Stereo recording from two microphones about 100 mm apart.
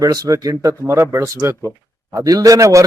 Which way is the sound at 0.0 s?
40° right (ahead or behind).